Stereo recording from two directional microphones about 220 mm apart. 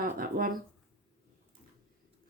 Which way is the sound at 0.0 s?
40° right (ahead or behind).